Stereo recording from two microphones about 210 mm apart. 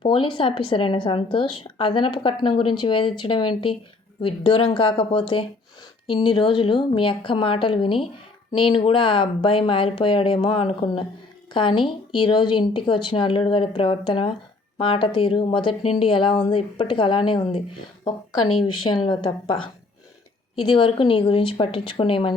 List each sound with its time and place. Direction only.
0.0 s a woman's voice: 25° left (ahead or behind)
20.7 s a woman's voice: 25° left (ahead or behind)